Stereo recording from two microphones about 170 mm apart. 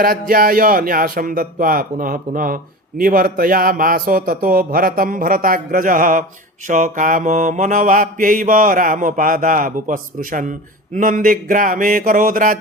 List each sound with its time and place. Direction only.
0.0 s a man's voice: 60° right (ahead or behind)
6.7 s mantra: 50° right (ahead or behind)